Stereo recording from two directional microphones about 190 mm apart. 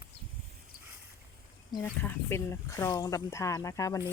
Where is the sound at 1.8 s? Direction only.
10° left (ahead or behind).